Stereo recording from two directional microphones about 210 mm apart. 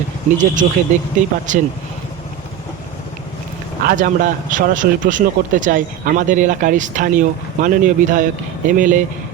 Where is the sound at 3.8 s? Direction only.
40° right (ahead or behind).